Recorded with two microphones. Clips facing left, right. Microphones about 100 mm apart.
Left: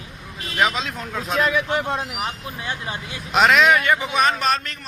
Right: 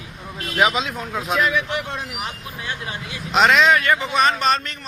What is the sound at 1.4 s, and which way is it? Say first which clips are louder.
Speech: left 1 dB; 35° left (ahead or behind).